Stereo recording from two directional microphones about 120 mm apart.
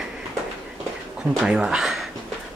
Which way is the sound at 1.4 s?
5° right (ahead or behind).